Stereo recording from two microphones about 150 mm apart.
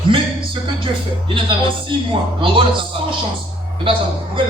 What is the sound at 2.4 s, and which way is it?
Speech, 35° right (ahead or behind).